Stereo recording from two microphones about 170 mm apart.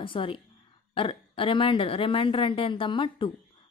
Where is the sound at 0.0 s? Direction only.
30° left (ahead or behind).